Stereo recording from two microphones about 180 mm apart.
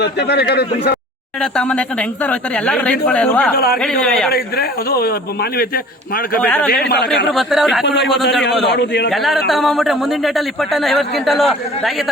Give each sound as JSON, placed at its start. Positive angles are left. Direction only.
{"t": 0.0, "sound": "a man's voice", "side_deg": 65}
{"t": 1.4, "sound": "speech", "side_deg": 5}
{"t": 3.5, "sound": "a man's voice", "side_deg": 55}
{"t": 4.0, "sound": "speech", "side_deg": 5}
{"t": 4.3, "sound": "a man's voice", "side_deg": 60}
{"t": 6.4, "sound": "speech", "side_deg": 5}
{"t": 6.8, "sound": "a man's voice", "side_deg": 65}
{"t": 7.3, "sound": "speech", "side_deg": 0}
{"t": 8.7, "sound": "a man's voice", "side_deg": 70}
{"t": 9.0, "sound": "speech", "side_deg": 0}